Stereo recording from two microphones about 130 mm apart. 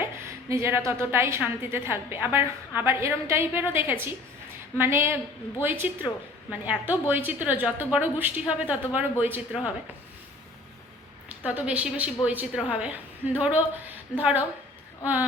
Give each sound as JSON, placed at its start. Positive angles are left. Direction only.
{"t": 0.0, "sound": "a sound", "side_deg": -20}
{"t": 0.9, "sound": "a woman's voice", "side_deg": -20}
{"t": 11.4, "sound": "a woman's voice", "side_deg": -10}